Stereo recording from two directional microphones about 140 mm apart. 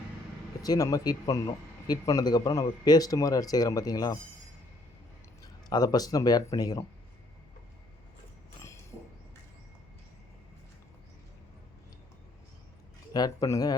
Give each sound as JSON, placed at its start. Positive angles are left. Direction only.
{"t": 0.6, "sound": "speech", "side_deg": 25}
{"t": 5.4, "sound": "speech", "side_deg": 30}
{"t": 13.1, "sound": "speech", "side_deg": 25}